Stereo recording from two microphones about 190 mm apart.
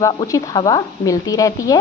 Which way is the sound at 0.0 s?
20° left (ahead or behind).